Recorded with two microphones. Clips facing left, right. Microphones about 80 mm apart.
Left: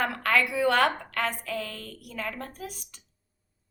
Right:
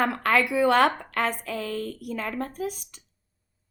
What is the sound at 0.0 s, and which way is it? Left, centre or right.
A woman's voice, right.